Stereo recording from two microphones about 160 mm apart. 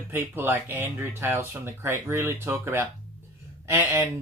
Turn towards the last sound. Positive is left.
turn(degrees=-15)  # may be behind; listen again after turning